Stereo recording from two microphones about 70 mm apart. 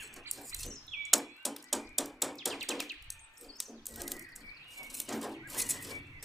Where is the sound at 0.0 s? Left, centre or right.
Centre.